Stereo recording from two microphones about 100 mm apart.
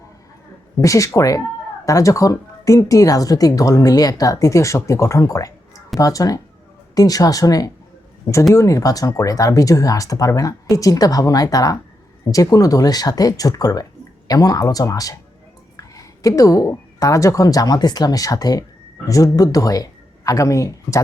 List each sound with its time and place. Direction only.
0.8 s a woman's voice: 30° left (ahead or behind)